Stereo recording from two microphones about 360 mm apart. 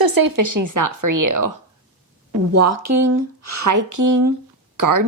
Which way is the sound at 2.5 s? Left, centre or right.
Right.